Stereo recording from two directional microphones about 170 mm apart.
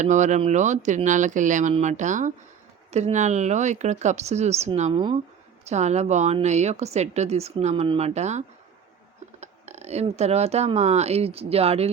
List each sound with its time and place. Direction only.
0.0 s speech: 45° right (ahead or behind)
4.9 s speech: 25° right (ahead or behind)
5.6 s speech: 40° right (ahead or behind)